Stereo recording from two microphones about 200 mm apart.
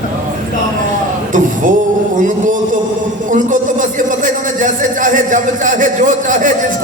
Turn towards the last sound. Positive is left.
turn(degrees=-40)  # may be behind; listen again after turning